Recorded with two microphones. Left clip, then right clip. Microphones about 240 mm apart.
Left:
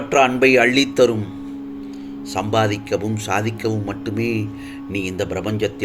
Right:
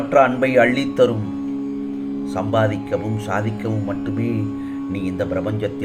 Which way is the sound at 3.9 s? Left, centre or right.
Left.